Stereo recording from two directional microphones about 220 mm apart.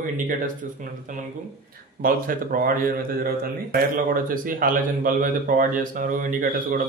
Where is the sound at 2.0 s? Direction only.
40° right (ahead or behind).